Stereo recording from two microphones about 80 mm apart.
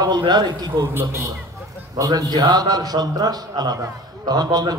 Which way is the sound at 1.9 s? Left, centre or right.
Right.